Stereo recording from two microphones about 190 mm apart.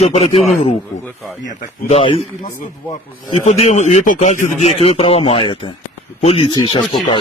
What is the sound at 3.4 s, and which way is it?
Speech, 35° left (ahead or behind).